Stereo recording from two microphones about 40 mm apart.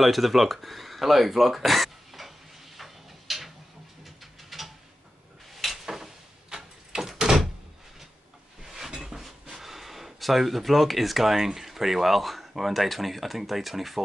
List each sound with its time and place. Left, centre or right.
0.0 s speech: centre
2.8 s a sound: centre
6.5 s a sound: right
7.0 s door: centre
8.6 s cupboard open or close: centre
8.9 s speech: centre